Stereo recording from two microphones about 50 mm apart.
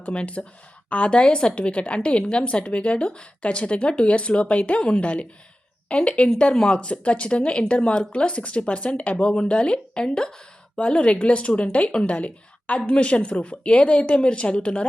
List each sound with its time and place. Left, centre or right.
0.0 s a woman's voice: left